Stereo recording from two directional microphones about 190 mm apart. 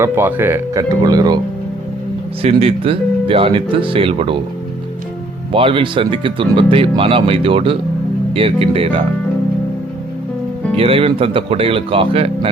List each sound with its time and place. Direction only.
0.0 s speech: 10° right (ahead or behind)
2.4 s speech: 30° right (ahead or behind)
5.5 s speech: 25° right (ahead or behind)
10.8 s speech: 30° right (ahead or behind)